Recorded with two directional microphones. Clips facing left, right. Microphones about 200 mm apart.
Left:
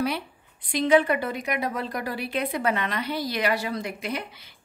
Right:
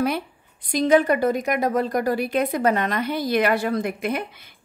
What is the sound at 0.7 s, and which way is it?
A woman's voice, 40° right (ahead or behind).